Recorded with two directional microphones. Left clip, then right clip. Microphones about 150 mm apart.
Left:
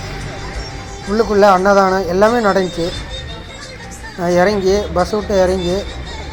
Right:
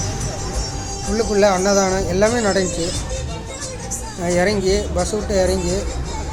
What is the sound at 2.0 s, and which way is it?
Speech, 15° right (ahead or behind).